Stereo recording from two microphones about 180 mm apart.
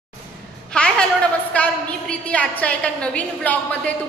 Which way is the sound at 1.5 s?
5° left (ahead or behind).